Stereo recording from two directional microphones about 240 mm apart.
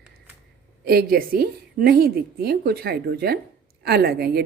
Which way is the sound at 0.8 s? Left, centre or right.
Right.